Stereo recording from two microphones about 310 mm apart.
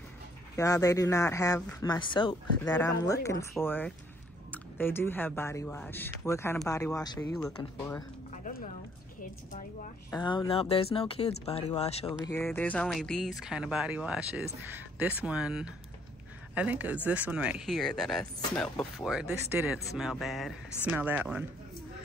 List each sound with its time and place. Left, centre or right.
0.6 s speech: centre
9.2 s a woman's voice: left
10.1 s a woman's voice: centre
12.3 s speech: centre